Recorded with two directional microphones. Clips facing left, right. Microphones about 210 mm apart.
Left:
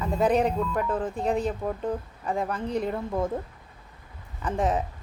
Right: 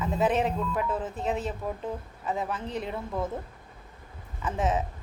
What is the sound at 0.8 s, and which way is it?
Speech, 40° left (ahead or behind).